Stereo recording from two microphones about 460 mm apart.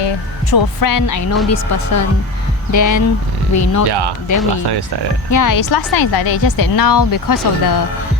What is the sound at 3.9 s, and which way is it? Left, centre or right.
Speech, right.